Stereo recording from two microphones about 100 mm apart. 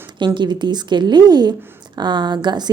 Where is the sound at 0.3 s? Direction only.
50° right (ahead or behind).